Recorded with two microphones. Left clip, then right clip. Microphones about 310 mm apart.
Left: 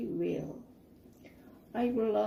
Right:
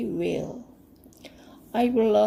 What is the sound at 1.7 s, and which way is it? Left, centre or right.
Speech, right.